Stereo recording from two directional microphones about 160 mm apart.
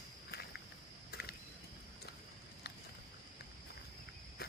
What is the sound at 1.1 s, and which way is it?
Mechanisms, 75° left (ahead or behind).